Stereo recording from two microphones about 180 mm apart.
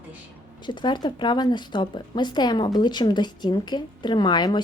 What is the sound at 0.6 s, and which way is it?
Speech, 25° left (ahead or behind).